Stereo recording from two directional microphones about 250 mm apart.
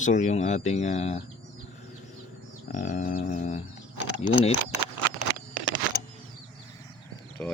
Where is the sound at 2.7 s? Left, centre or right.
Left.